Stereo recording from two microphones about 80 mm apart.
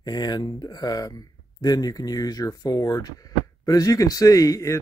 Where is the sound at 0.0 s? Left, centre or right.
Left.